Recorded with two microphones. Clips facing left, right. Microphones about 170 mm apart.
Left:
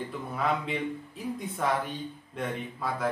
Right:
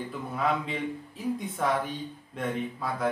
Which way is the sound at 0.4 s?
Centre (ahead or behind).